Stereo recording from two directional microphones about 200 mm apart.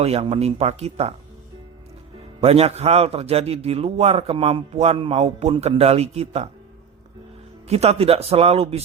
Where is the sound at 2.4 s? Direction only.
30° right (ahead or behind).